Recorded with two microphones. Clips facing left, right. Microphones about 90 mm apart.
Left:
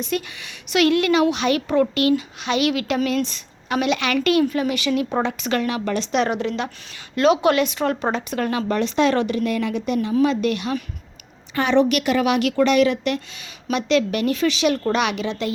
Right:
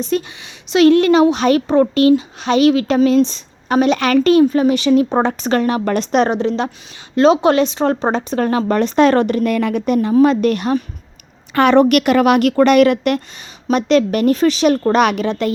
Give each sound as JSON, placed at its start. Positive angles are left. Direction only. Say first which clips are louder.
{"t": 0.0, "sound": "a woman's voice", "louder": "right 6 dB", "side_deg": -30}
{"t": 11.5, "sound": "speech", "louder": "right 7 dB", "side_deg": -55}
{"t": 13.7, "sound": "speech", "louder": "right 6 dB", "side_deg": -40}